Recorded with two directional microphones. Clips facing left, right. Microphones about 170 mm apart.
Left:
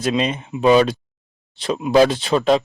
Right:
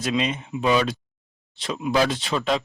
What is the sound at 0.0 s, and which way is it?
Speech, 35° left (ahead or behind).